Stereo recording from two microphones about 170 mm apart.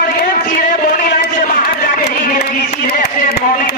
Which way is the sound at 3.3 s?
75° left (ahead or behind).